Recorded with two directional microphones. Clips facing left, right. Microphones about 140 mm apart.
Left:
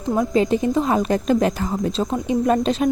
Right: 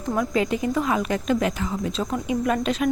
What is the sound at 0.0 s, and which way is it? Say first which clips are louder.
Speech: left 4 dB; 25° left (ahead or behind).